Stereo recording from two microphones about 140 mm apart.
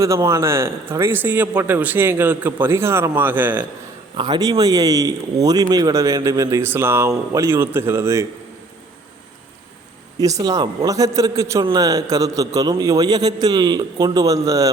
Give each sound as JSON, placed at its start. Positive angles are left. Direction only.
{"t": 0.0, "sound": "a man's voice", "side_deg": -20}
{"t": 4.2, "sound": "speech", "side_deg": -30}
{"t": 10.2, "sound": "speech", "side_deg": -25}